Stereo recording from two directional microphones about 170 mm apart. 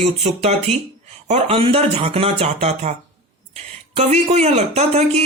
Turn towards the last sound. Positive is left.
turn(degrees=-40)  # may be behind; listen again after turning